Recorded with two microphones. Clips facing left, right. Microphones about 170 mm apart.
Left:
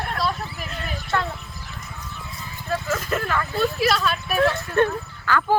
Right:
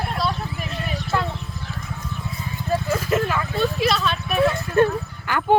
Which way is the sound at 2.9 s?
10° right (ahead or behind).